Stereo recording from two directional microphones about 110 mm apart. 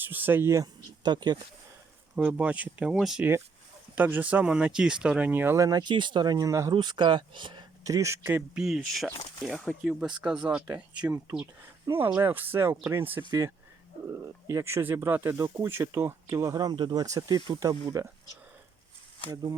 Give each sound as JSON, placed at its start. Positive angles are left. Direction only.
{"t": 0.0, "sound": "speech", "side_deg": -20}
{"t": 1.0, "sound": "speech", "side_deg": -40}
{"t": 2.1, "sound": "speech", "side_deg": -10}
{"t": 3.9, "sound": "speech", "side_deg": -15}
{"t": 5.5, "sound": "speech", "side_deg": -35}
{"t": 6.7, "sound": "speech", "side_deg": -45}
{"t": 7.9, "sound": "speech", "side_deg": -30}
{"t": 8.5, "sound": "speech", "side_deg": -5}
{"t": 19.3, "sound": "speech", "side_deg": -35}